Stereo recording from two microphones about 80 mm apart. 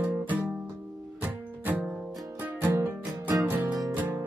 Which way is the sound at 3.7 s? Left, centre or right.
Right.